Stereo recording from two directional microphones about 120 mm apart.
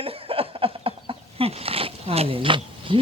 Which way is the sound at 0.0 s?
50° right (ahead or behind).